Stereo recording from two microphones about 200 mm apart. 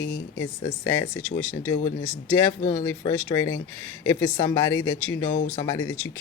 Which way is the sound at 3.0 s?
20° left (ahead or behind).